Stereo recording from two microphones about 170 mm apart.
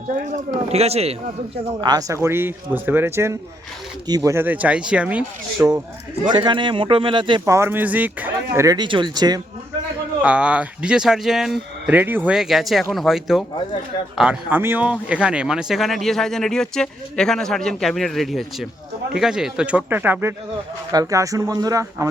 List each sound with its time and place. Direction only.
0.1 s speech: 45° right (ahead or behind)
1.8 s speech: 20° right (ahead or behind); by 5.6 s 5° right (ahead or behind)
6.2 s a man's voice: 25° right (ahead or behind)
7.4 s speech: 15° right (ahead or behind)
8.5 s a man's voice: 20° right (ahead or behind)
10.2 s a man's voice: 5° right (ahead or behind)